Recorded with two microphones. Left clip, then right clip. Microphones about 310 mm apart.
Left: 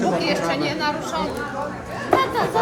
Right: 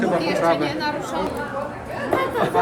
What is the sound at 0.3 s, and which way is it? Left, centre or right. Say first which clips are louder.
Speech: right 2 dB; centre.